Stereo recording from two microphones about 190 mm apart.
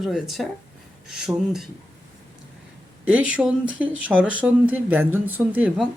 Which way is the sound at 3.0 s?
5° right (ahead or behind).